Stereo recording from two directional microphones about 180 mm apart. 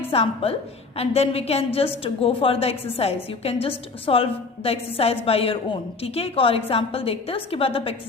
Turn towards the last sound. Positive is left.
turn(degrees=30)  # may be behind; listen again after turning